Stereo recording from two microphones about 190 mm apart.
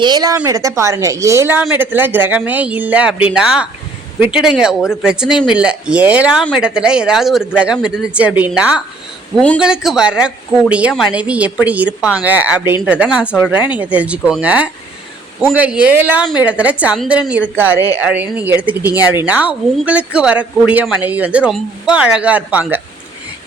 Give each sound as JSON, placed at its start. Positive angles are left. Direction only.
{"t": 0.0, "sound": "a woman's voice", "side_deg": -20}
{"t": 9.3, "sound": "a man's voice", "side_deg": 5}
{"t": 9.6, "sound": "a woman's voice", "side_deg": -5}